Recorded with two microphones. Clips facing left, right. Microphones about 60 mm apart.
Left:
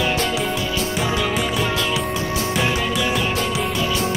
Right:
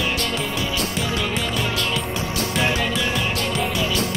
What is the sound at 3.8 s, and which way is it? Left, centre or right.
Music, left.